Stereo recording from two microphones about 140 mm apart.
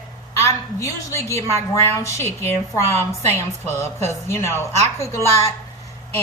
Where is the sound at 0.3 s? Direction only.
20° left (ahead or behind).